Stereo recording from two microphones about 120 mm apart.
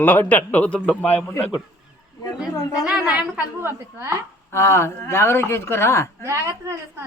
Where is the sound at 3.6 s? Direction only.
20° right (ahead or behind).